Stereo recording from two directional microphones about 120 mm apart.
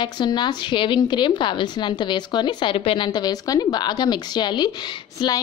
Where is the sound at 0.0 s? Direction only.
40° left (ahead or behind).